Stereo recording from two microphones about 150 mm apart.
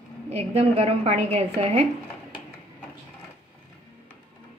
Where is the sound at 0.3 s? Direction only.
45° right (ahead or behind).